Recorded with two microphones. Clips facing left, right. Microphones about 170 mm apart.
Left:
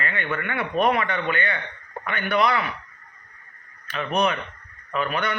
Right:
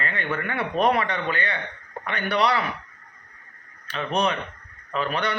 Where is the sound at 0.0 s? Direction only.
35° right (ahead or behind).